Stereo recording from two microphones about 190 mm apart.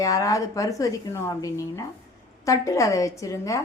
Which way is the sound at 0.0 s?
15° left (ahead or behind).